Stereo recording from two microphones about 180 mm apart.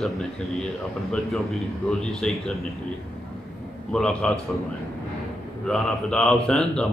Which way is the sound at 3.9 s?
5° left (ahead or behind).